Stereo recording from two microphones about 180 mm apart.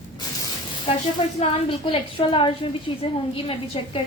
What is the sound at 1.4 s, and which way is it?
A woman's voice, 30° left (ahead or behind).